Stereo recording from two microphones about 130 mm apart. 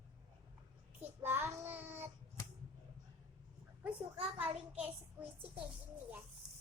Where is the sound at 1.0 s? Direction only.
20° right (ahead or behind).